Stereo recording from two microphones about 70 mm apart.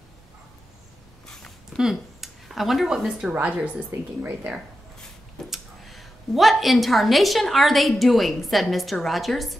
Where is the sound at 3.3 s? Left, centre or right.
Right.